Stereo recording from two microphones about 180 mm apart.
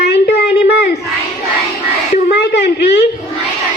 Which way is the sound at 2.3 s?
65° left (ahead or behind).